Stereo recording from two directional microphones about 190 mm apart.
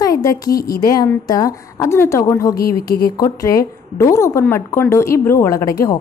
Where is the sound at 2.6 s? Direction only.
50° left (ahead or behind).